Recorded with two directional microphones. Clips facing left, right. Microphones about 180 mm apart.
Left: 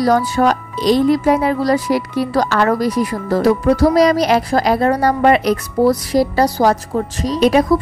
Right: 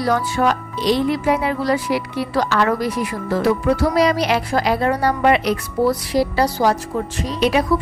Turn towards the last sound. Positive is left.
turn(degrees=40)  # may be behind; listen again after turning